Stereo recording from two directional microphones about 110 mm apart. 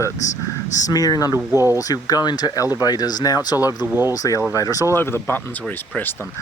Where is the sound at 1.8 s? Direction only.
35° left (ahead or behind).